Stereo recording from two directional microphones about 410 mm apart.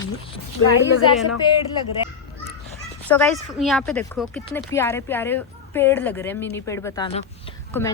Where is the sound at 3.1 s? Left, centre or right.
Centre.